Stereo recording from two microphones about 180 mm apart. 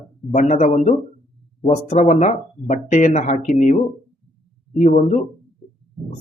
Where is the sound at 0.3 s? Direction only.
40° left (ahead or behind).